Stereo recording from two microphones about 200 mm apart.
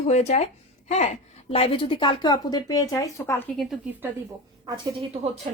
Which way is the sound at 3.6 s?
Centre (ahead or behind).